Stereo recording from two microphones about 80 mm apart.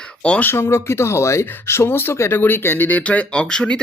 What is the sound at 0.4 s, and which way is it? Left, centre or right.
Speech, left.